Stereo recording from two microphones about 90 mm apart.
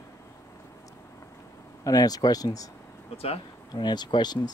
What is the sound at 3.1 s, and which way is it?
Speech, 90° left.